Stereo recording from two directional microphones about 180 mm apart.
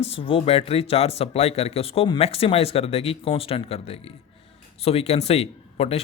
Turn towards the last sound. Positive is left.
turn(degrees=35)  # may be behind; listen again after turning